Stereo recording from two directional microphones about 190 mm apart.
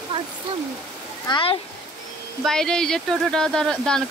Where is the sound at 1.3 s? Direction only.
30° left (ahead or behind).